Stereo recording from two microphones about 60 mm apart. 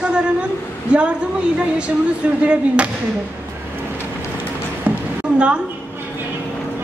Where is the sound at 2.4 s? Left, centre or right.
Centre.